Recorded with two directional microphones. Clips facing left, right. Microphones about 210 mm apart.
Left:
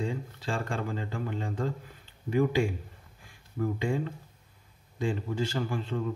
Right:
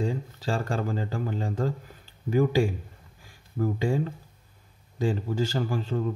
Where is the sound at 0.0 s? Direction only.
40° right (ahead or behind).